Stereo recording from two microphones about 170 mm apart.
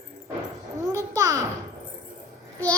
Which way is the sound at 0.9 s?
20° right (ahead or behind).